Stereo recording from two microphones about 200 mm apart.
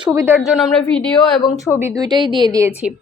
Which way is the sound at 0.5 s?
5° left (ahead or behind).